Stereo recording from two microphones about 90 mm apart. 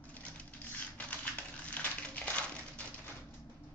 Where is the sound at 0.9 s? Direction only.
15° left (ahead or behind).